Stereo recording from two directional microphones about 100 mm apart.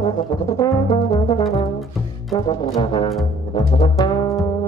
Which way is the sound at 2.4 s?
45° left (ahead or behind).